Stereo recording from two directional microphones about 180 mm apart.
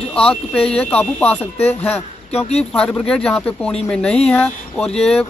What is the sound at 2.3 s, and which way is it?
Speech, 35° left (ahead or behind).